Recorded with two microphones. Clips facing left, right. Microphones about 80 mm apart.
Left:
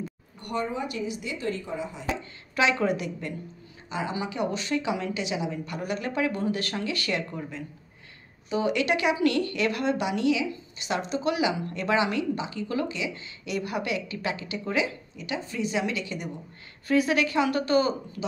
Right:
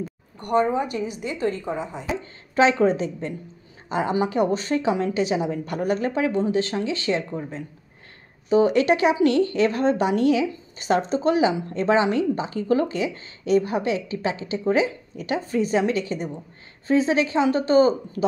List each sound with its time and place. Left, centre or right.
0.4 s speech: right
2.5 s speech: right
3.9 s speech: right
15.1 s speech: right